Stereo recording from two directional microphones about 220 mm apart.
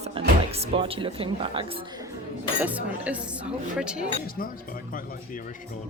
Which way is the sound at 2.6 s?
5° right (ahead or behind).